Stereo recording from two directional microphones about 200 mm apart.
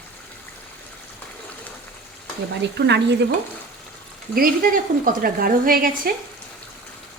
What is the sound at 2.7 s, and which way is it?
Speech, 60° right (ahead or behind).